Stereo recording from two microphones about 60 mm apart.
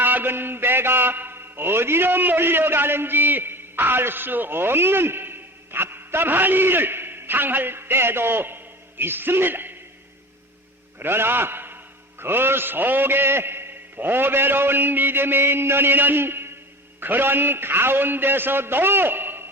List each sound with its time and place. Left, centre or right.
0.0 s a man's voice: right
11.0 s a man's voice: right